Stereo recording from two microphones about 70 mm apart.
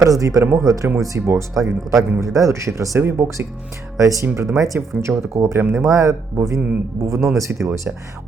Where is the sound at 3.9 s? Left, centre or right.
Right.